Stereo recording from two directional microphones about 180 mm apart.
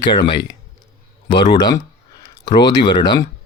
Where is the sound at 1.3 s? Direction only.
25° left (ahead or behind).